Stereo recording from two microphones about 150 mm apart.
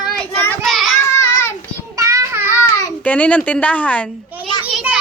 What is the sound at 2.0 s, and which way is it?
Child singing, 20° right (ahead or behind).